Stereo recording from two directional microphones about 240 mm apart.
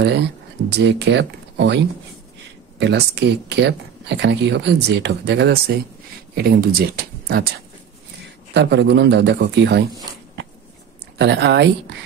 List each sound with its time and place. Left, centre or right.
0.7 s speech: right
8.5 s speech: right
11.1 s speech: right